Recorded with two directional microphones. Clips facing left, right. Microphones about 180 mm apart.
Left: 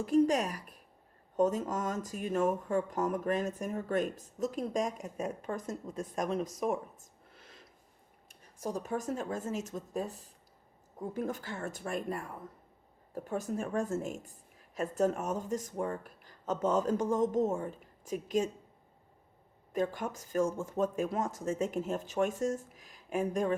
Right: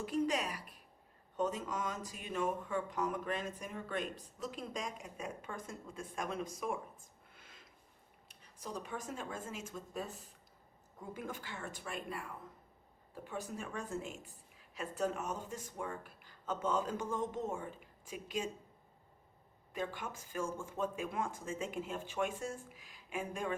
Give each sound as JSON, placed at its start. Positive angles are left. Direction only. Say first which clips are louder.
{"t": 0.0, "sound": "speech", "louder": "left 8 dB", "side_deg": 45}
{"t": 7.3, "sound": "a sound", "louder": "left 6 dB", "side_deg": 35}
{"t": 8.3, "sound": "speech", "louder": "left 8 dB", "side_deg": 45}
{"t": 11.1, "sound": "speech", "louder": "left 7 dB", "side_deg": 40}
{"t": 19.7, "sound": "speech", "louder": "left 8 dB", "side_deg": 40}